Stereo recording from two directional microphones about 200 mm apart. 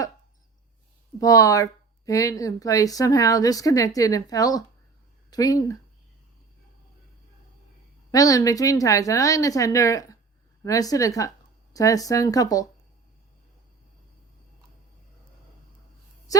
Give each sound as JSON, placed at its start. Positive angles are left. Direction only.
{"t": 1.2, "sound": "speech", "side_deg": 15}
{"t": 8.1, "sound": "speech", "side_deg": 15}
{"t": 16.3, "sound": "music", "side_deg": 15}